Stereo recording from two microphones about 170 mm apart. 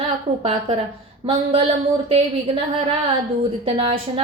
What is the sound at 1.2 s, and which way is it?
A woman's voice, 35° right (ahead or behind).